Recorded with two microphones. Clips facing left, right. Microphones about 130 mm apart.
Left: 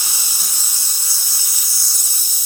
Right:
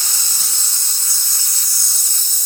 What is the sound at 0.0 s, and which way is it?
Steam, 10° left (ahead or behind).